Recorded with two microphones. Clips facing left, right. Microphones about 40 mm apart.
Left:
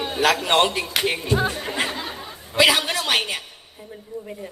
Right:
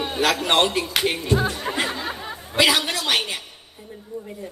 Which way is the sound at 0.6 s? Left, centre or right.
Centre.